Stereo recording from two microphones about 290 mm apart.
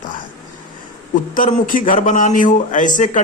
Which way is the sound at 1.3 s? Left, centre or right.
Left.